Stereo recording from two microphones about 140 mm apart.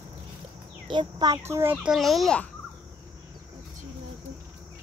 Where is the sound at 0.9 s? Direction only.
30° right (ahead or behind).